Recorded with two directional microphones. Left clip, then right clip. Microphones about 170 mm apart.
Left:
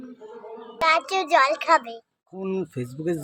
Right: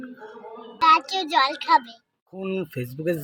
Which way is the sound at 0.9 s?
45° left (ahead or behind).